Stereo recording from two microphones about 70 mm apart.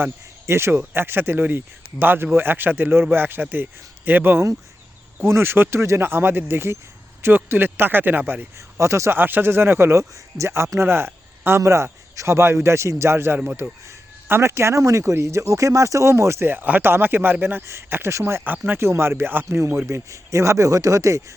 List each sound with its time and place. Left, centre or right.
0.0 s speech: right
8.5 s speech: right
9.1 s speech: right
18.4 s speech: right
19.9 s speech: right